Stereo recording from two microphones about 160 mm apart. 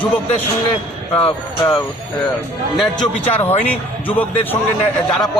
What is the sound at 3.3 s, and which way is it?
Speech, 10° left (ahead or behind).